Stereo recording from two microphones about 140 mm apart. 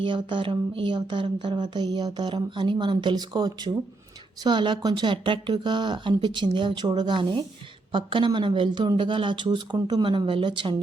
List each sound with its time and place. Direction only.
0.0 s speech: 35° right (ahead or behind)